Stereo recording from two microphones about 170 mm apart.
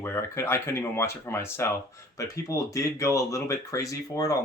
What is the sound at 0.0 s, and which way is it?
Speech, 15° left (ahead or behind).